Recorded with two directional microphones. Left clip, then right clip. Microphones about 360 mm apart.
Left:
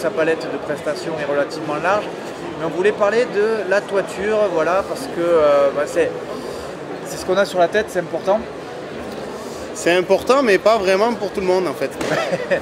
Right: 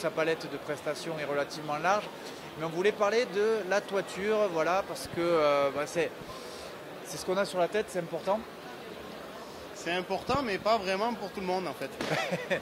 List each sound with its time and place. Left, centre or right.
0.0 s speech: right
7.2 s speech: right
9.8 s speech: centre; by 11.9 s right